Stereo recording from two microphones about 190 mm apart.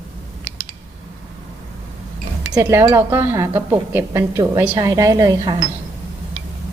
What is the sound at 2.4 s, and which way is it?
A woman's voice, 15° right (ahead or behind).